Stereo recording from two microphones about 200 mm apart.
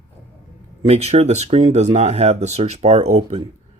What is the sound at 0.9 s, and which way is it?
Speech, 30° right (ahead or behind).